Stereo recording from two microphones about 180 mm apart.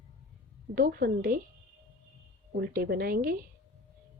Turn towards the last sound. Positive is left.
turn(degrees=-55)  # may be behind; listen again after turning